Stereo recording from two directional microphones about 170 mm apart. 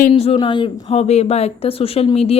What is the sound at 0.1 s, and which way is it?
A woman's voice, 35° left (ahead or behind).